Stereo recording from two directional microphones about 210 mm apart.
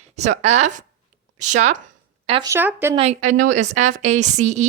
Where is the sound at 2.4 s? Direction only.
10° right (ahead or behind).